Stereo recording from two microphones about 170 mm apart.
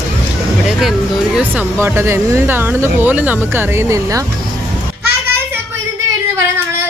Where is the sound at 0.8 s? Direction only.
Centre (ahead or behind); by 4.2 s 15° right (ahead or behind).